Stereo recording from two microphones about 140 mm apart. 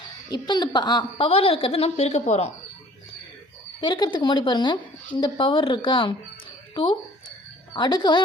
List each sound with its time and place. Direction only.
0.3 s a woman's voice: 30° left (ahead or behind)
1.3 s a woman's voice: 40° left (ahead or behind)
3.8 s a woman's voice: 30° left (ahead or behind)
7.7 s a woman's voice: 35° left (ahead or behind)